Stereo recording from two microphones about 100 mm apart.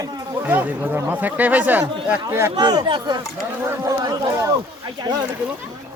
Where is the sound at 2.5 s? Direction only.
45° right (ahead or behind).